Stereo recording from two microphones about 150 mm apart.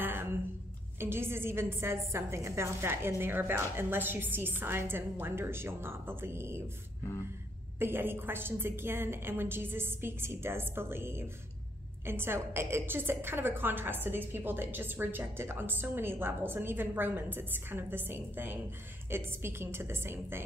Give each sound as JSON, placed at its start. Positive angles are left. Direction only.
{"t": 0.0, "sound": "a sound", "side_deg": -15}
{"t": 0.9, "sound": "a woman's voice", "side_deg": -15}
{"t": 7.8, "sound": "a woman's voice", "side_deg": -15}